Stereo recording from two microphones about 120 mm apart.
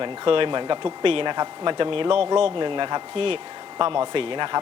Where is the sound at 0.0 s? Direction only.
45° right (ahead or behind).